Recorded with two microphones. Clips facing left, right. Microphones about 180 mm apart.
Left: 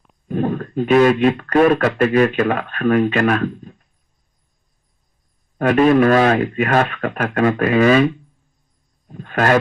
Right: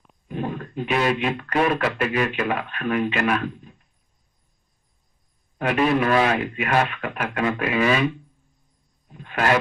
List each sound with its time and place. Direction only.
0.3 s speech: 45° left (ahead or behind)
5.5 s speech: 45° left (ahead or behind)
9.0 s speech: 45° left (ahead or behind)